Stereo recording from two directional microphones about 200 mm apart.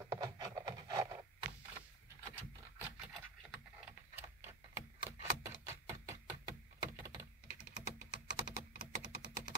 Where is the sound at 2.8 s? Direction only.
Centre (ahead or behind).